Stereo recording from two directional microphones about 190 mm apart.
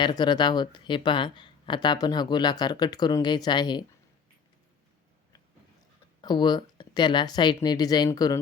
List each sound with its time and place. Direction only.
0.0 s speech: 20° left (ahead or behind)
6.2 s speech: 20° left (ahead or behind)